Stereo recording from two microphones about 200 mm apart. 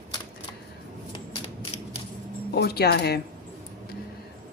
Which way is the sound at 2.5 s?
55° left (ahead or behind).